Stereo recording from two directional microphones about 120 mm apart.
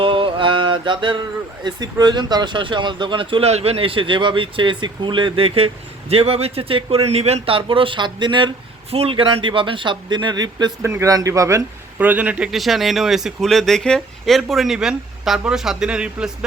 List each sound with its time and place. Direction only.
0.0 s mantra: 45° right (ahead or behind)
1.6 s speech: 35° right (ahead or behind)
10.8 s a man's voice: 25° right (ahead or behind)
11.9 s speech: 15° right (ahead or behind)